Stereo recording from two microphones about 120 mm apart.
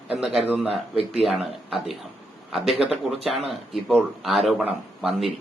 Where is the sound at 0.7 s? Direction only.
55° right (ahead or behind).